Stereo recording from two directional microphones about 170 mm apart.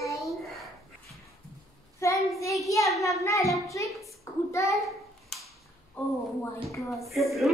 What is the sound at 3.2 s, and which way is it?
Child singing, 20° left (ahead or behind).